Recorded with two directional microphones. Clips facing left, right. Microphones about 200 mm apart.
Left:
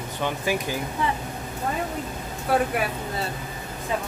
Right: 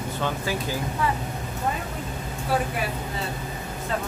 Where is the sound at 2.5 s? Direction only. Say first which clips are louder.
Left 3 dB; 60° left (ahead or behind).